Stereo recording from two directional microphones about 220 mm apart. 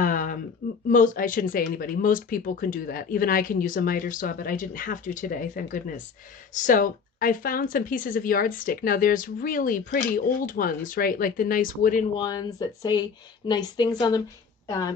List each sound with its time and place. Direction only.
0.0 s a sound: 40° left (ahead or behind)
0.8 s speech: 35° left (ahead or behind)
12.2 s speech: 20° left (ahead or behind)